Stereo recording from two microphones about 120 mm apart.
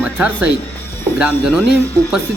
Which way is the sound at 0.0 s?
10° right (ahead or behind).